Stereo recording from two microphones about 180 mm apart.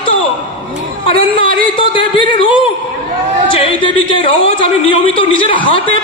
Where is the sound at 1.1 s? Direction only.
30° left (ahead or behind).